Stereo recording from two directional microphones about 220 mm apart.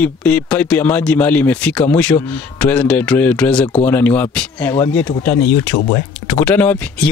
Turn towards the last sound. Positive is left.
turn(degrees=5)  # may be behind; listen again after turning